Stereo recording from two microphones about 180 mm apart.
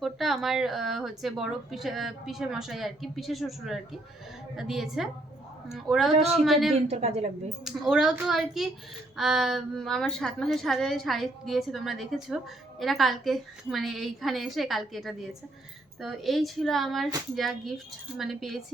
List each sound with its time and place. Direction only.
0.0 s a woman's voice: centre (ahead or behind)
6.7 s a woman's voice: 35° right (ahead or behind)
7.6 s a woman's voice: centre (ahead or behind)